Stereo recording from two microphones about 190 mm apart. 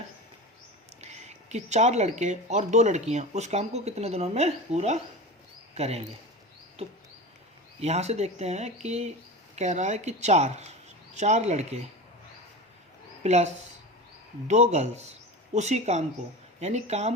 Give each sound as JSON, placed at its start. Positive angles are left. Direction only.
{"t": 1.0, "sound": "speech", "side_deg": -35}
{"t": 13.2, "sound": "speech", "side_deg": -35}